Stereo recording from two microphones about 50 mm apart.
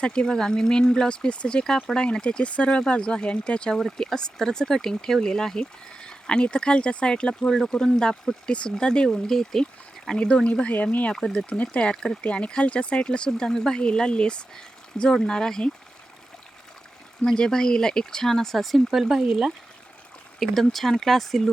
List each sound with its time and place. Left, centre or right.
0.0 s speech: centre
10.2 s speech: left
11.1 s speech: centre
17.2 s speech: centre
20.4 s speech: centre